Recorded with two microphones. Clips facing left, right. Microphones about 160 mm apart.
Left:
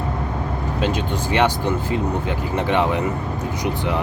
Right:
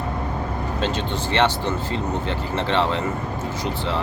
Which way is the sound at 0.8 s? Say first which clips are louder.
Left 3 dB; 10° left (ahead or behind).